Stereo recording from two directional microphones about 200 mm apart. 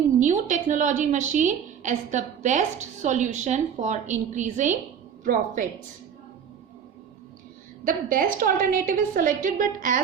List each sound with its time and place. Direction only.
0.2 s a woman's voice: 40° right (ahead or behind)
7.9 s a woman's voice: 45° right (ahead or behind)